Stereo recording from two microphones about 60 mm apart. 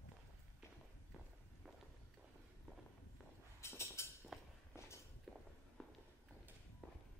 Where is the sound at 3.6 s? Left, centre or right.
Left.